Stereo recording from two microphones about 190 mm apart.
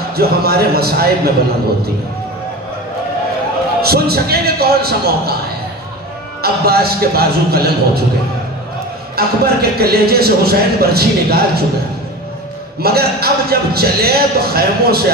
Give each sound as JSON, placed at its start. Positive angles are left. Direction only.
{"t": 0.1, "sound": "speech", "side_deg": -55}
{"t": 3.8, "sound": "speech", "side_deg": -55}
{"t": 6.4, "sound": "speech", "side_deg": -55}
{"t": 9.1, "sound": "speech", "side_deg": -55}
{"t": 12.8, "sound": "speech", "side_deg": -55}